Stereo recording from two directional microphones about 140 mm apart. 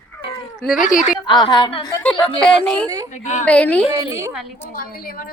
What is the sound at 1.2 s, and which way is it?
Speech, 30° left (ahead or behind).